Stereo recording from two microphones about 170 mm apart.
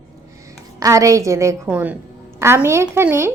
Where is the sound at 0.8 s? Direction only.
20° right (ahead or behind).